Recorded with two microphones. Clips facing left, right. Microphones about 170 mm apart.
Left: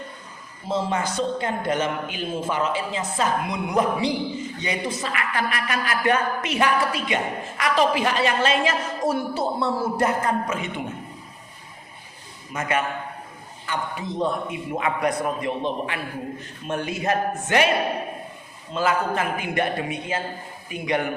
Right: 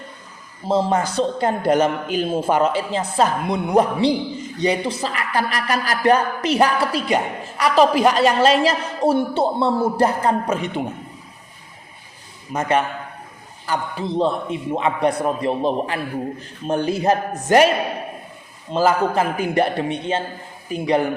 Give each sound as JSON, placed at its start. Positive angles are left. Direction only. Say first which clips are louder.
{"t": 0.7, "sound": "a man's voice", "louder": "right 6 dB", "side_deg": -35}
{"t": 12.5, "sound": "a man's voice", "louder": "right 5 dB", "side_deg": -30}
{"t": 18.7, "sound": "a man's voice", "louder": "right 5 dB", "side_deg": -35}